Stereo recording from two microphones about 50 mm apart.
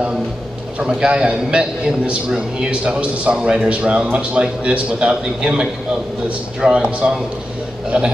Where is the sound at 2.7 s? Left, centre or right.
Right.